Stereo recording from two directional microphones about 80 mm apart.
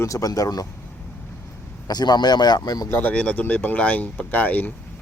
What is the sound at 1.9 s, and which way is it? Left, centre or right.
Speech, left.